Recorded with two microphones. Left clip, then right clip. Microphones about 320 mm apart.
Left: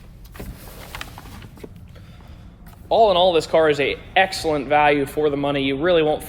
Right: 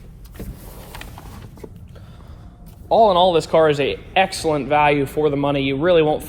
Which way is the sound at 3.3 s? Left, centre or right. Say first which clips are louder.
Right 1 dB; centre.